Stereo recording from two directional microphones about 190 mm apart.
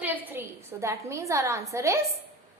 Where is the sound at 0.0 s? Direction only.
10° right (ahead or behind).